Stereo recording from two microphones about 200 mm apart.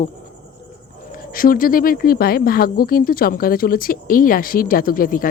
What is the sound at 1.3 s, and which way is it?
Speech, 45° left (ahead or behind).